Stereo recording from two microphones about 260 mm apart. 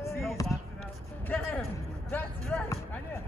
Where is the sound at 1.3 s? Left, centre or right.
Centre.